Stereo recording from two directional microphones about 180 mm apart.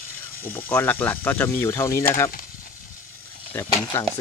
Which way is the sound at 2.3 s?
50° left (ahead or behind).